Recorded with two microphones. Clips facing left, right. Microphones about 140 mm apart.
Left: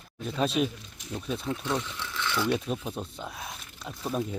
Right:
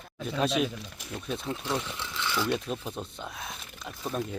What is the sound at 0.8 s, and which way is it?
Speech, 65° right (ahead or behind).